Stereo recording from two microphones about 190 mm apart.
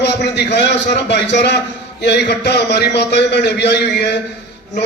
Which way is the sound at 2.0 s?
60° left (ahead or behind).